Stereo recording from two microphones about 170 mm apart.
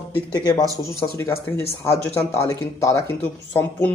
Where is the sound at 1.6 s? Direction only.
15° left (ahead or behind).